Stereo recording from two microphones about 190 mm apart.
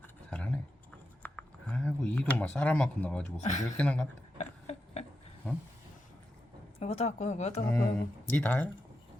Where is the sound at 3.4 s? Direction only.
40° left (ahead or behind).